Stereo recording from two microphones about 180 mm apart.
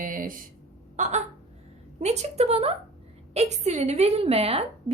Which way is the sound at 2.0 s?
40° right (ahead or behind).